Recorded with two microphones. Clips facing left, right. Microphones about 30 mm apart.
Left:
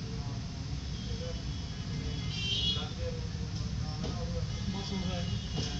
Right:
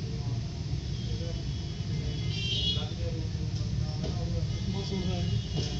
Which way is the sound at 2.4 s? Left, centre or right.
Right.